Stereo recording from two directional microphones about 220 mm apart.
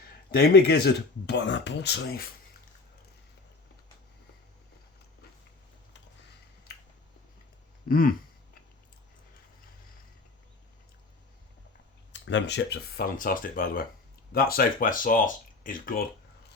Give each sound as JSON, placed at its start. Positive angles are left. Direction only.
{"t": 0.3, "sound": "speech", "side_deg": 45}
{"t": 7.9, "sound": "a sound", "side_deg": 40}
{"t": 12.1, "sound": "speech", "side_deg": 55}